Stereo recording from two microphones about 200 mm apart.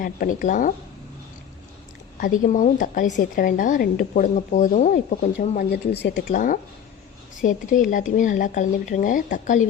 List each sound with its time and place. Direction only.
0.0 s speech: 45° left (ahead or behind)
2.2 s a woman's voice: 40° left (ahead or behind); by 6.3 s 60° left (ahead or behind)
6.3 s speech: 40° left (ahead or behind)